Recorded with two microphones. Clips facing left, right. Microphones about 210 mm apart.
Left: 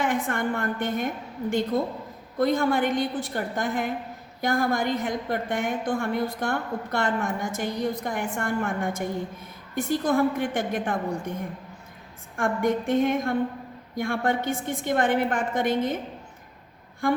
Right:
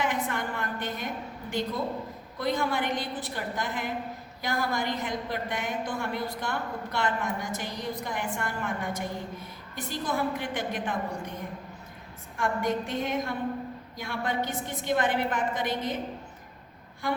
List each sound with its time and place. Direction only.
0.0 s a woman's voice: 50° left (ahead or behind)
12.4 s a woman's voice: 50° left (ahead or behind)